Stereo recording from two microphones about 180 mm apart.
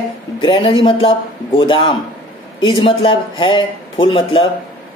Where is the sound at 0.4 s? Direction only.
30° left (ahead or behind).